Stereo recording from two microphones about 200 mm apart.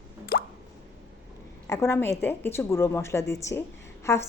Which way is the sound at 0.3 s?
50° left (ahead or behind).